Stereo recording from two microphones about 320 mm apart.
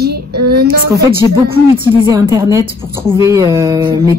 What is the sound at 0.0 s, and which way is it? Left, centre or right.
Child singing, right.